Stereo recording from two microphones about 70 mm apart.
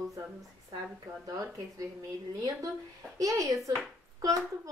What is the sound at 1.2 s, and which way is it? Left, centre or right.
Speech, right.